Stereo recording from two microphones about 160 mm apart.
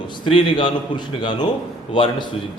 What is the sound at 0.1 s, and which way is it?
A man's voice, 30° left (ahead or behind).